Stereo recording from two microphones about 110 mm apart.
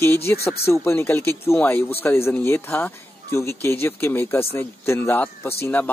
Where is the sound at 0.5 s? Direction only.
20° left (ahead or behind).